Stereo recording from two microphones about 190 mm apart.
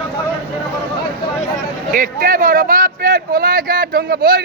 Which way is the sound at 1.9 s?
45° right (ahead or behind).